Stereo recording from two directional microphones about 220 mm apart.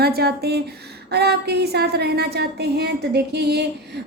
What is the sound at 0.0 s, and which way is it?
Speech, 45° right (ahead or behind).